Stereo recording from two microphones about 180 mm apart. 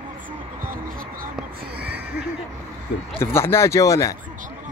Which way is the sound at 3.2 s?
15° left (ahead or behind).